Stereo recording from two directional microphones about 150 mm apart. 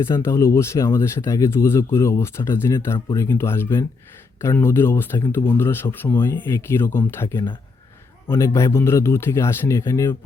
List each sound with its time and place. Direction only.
0.0 s speech: 20° left (ahead or behind)